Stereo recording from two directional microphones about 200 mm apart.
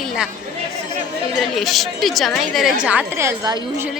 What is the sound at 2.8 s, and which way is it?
A woman's voice, 10° right (ahead or behind).